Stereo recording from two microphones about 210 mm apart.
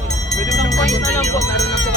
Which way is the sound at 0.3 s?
15° left (ahead or behind).